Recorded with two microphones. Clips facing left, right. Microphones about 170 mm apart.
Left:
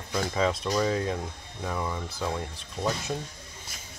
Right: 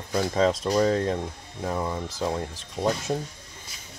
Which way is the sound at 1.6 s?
25° right (ahead or behind).